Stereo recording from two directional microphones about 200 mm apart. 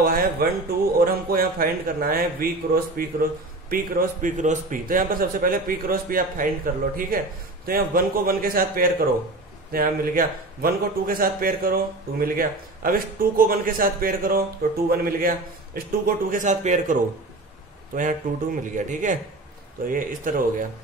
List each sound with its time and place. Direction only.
0.0 s a man's voice: 45° right (ahead or behind)